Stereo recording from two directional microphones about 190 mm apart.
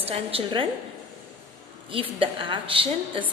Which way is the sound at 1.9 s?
30° right (ahead or behind).